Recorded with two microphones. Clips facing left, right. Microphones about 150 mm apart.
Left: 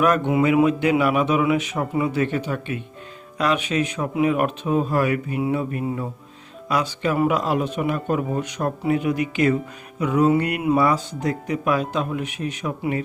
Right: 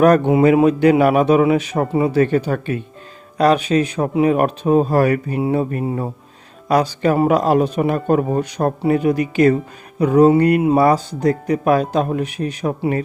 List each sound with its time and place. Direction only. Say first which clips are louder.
0.0 s speech: right 7 dB; 35° right (ahead or behind)